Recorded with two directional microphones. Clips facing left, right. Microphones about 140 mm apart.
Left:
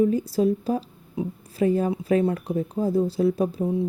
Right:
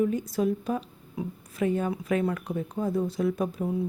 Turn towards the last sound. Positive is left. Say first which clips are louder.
# left 5 dB
turn(degrees=25)  # may be behind; listen again after turning